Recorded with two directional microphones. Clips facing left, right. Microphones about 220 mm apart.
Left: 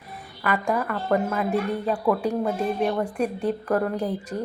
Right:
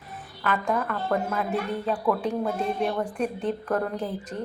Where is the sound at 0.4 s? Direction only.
10° left (ahead or behind).